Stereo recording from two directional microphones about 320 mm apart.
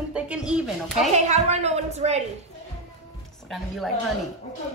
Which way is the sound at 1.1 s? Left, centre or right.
Right.